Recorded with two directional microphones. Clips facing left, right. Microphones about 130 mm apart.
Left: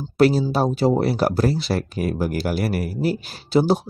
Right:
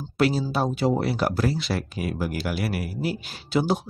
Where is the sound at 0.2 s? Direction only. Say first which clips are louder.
Left 6 dB; 40° left (ahead or behind).